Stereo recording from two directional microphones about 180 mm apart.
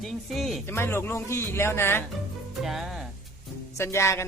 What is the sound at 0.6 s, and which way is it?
Speech, 15° left (ahead or behind).